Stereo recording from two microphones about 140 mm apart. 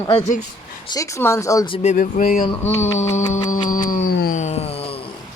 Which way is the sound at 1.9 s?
80° left.